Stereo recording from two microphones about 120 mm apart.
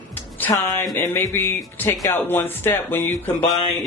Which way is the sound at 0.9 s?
20° left (ahead or behind).